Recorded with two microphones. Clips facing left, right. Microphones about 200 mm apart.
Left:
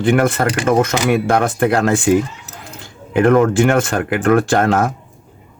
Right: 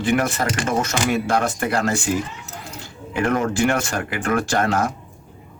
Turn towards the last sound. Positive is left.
turn(degrees=55)  # may be behind; listen again after turning